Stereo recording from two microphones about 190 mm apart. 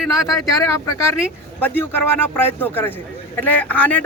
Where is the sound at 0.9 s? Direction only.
15° left (ahead or behind).